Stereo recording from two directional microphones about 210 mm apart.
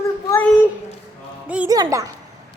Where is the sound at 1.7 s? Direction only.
15° right (ahead or behind).